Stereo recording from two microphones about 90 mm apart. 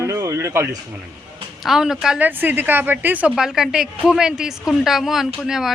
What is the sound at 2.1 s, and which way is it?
Speech, 20° right (ahead or behind).